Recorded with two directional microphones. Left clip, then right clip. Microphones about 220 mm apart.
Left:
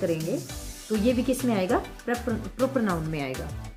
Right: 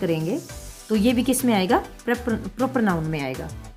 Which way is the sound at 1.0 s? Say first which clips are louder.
Right 3 dB; 40° right (ahead or behind).